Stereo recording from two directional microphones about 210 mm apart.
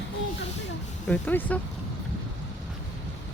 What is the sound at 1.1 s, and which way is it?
Speech, 10° left (ahead or behind).